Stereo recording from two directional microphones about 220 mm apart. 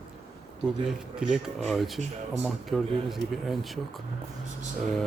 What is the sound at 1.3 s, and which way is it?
Speech, centre (ahead or behind).